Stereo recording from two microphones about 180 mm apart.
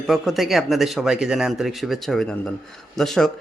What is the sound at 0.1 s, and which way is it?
A man's voice, centre (ahead or behind).